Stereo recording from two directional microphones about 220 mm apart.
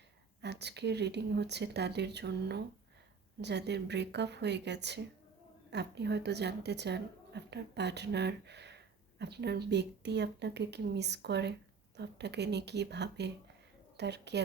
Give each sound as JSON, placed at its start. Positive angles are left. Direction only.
{"t": 0.4, "sound": "a woman's voice", "side_deg": -50}